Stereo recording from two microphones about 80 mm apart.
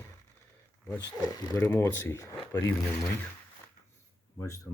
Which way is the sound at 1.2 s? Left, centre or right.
Left.